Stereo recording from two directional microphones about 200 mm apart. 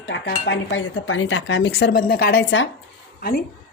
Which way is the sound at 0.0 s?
60° left (ahead or behind).